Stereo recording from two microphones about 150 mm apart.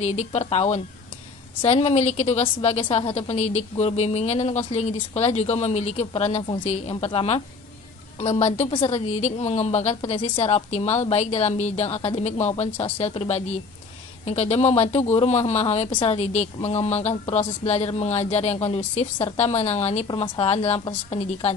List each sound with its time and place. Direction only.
0.0 s a woman's voice: 50° left (ahead or behind)
18.9 s a woman's voice: 35° left (ahead or behind)
19.3 s a woman's voice: 45° left (ahead or behind)